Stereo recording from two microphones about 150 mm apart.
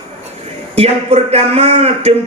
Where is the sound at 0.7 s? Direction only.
45° right (ahead or behind).